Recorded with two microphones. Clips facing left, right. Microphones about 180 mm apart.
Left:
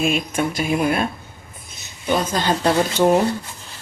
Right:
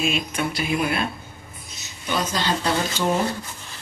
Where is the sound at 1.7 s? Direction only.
50° left (ahead or behind).